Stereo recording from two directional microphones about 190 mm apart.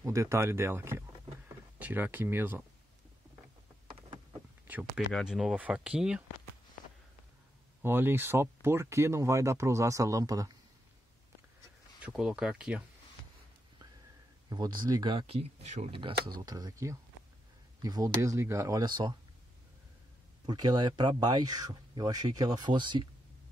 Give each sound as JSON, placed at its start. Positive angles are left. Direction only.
{"t": 0.0, "sound": "speech", "side_deg": -15}
{"t": 4.6, "sound": "speech", "side_deg": -10}
{"t": 7.8, "sound": "speech", "side_deg": -10}
{"t": 12.0, "sound": "speech", "side_deg": -5}
{"t": 14.5, "sound": "speech", "side_deg": -20}
{"t": 20.4, "sound": "speech", "side_deg": -20}